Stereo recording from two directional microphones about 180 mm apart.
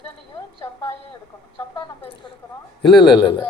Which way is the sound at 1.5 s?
25° left (ahead or behind).